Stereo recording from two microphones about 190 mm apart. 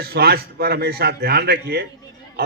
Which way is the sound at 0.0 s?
55° right (ahead or behind).